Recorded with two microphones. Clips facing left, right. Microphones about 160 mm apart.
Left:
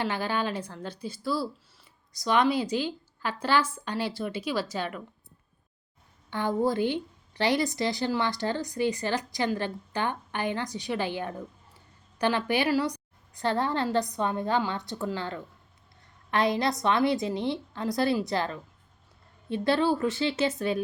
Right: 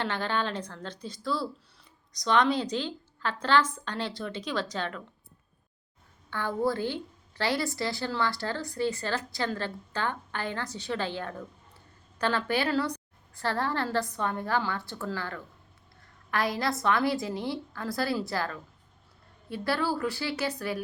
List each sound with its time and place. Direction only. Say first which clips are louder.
0.0 s a woman's voice: left 1 dB; 10° left (ahead or behind)
6.3 s a woman's voice: left 3 dB; 15° left (ahead or behind)